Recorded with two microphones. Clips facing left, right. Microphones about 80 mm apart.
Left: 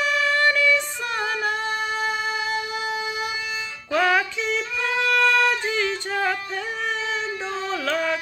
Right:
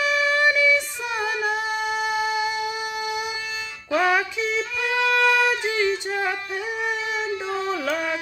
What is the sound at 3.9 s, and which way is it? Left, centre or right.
Music, centre.